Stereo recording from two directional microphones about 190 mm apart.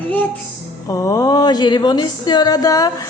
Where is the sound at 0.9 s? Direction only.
20° left (ahead or behind).